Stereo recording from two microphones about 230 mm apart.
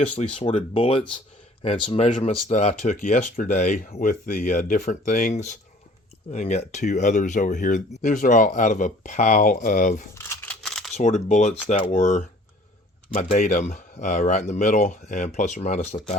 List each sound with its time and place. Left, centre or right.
0.3 s speech: left
10.2 s a sound: centre
10.9 s speech: left